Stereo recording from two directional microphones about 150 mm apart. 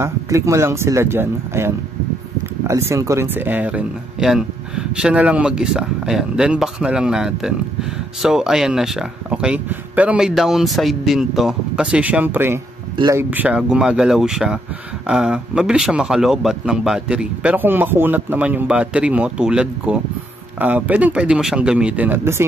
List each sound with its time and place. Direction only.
0.0 s speech: 20° right (ahead or behind)